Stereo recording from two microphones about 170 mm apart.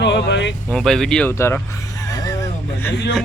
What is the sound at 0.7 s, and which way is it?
Speech, 5° left (ahead or behind).